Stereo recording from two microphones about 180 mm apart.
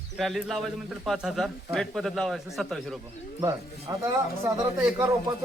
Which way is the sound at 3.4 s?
20° right (ahead or behind).